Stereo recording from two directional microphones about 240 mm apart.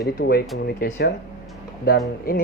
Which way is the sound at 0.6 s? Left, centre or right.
Left.